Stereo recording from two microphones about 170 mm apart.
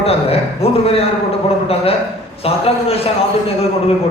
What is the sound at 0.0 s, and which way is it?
A man's voice, 35° left (ahead or behind).